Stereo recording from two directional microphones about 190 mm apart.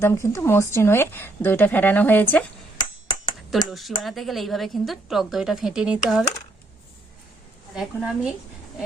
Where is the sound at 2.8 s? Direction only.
25° left (ahead or behind).